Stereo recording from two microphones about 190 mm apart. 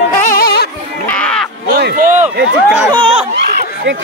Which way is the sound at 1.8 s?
55° right (ahead or behind).